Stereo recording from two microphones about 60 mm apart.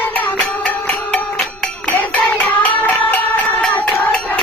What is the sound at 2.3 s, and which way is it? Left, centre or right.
Music, left.